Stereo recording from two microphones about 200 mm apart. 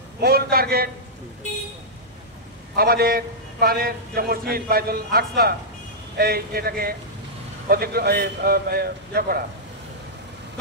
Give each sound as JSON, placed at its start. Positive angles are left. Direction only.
{"t": 0.2, "sound": "a man's voice", "side_deg": -50}
{"t": 2.7, "sound": "a man's voice", "side_deg": -50}